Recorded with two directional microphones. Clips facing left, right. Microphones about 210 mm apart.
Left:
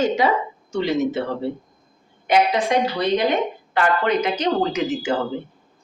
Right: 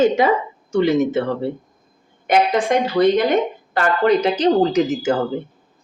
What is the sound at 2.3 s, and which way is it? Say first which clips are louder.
Speech: right 2 dB; 50° right (ahead or behind).